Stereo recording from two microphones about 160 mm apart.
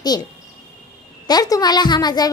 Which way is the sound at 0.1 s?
25° left (ahead or behind).